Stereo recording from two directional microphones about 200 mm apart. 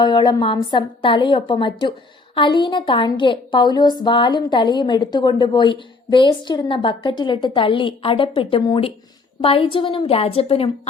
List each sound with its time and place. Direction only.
0.0 s a woman's voice: 20° left (ahead or behind)